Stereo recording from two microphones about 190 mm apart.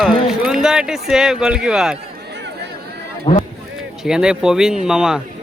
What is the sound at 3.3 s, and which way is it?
Speech, 25° left (ahead or behind).